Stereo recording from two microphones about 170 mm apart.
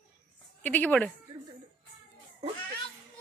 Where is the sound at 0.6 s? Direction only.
10° left (ahead or behind).